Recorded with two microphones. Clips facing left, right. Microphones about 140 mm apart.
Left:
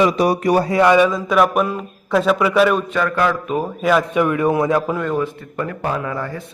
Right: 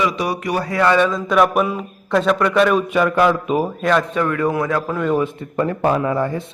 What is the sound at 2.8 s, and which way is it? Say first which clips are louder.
Speech: right 3 dB; 15° right (ahead or behind).